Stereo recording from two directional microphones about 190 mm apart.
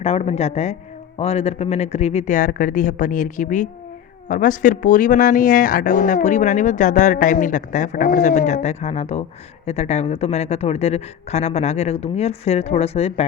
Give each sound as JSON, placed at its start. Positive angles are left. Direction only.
{"t": 0.0, "sound": "speech", "side_deg": 35}